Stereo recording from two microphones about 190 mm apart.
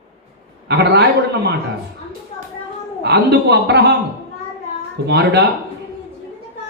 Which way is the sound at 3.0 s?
60° right (ahead or behind).